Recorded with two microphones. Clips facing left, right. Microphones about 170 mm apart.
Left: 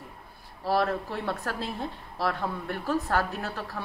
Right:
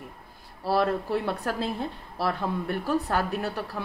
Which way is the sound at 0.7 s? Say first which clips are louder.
Right 3 dB; 15° right (ahead or behind).